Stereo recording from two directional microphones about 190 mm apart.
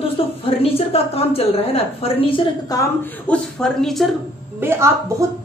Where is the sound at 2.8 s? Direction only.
10° left (ahead or behind).